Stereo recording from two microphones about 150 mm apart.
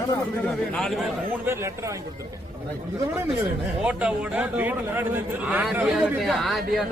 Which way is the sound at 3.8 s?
10° right (ahead or behind).